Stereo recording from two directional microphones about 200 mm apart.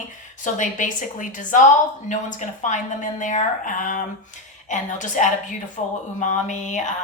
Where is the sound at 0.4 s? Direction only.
40° left (ahead or behind).